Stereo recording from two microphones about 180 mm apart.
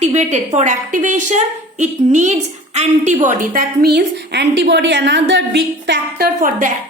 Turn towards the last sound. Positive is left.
turn(degrees=-50)  # may be behind; listen again after turning